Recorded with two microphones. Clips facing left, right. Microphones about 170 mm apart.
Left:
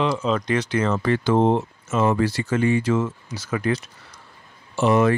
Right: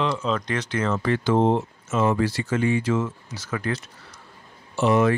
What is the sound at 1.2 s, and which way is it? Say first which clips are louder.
Speech: left 1 dB; 60° left (ahead or behind).